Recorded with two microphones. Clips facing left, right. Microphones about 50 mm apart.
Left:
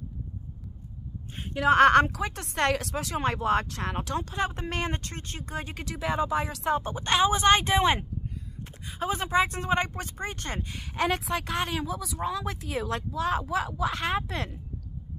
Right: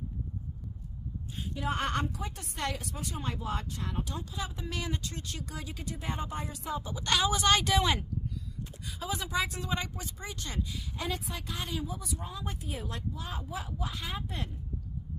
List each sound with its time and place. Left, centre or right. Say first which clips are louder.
1.5 s speech: left 14 dB; left
5.9 s speech: left 10 dB; left
7.0 s a woman's voice: left 3 dB; left